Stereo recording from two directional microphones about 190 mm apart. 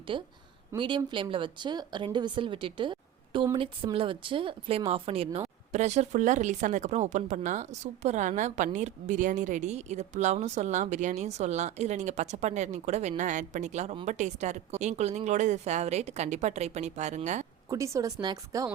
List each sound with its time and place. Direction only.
0.1 s speech: 25° right (ahead or behind)
17.7 s a woman's voice: 15° right (ahead or behind)